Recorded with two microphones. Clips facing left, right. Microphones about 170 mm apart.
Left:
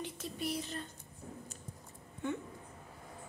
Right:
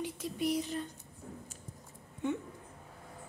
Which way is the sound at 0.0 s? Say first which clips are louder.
Right 5 dB; 15° right (ahead or behind).